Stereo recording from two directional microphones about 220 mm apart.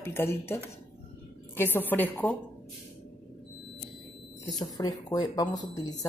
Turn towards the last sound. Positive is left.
turn(degrees=15)  # may be behind; listen again after turning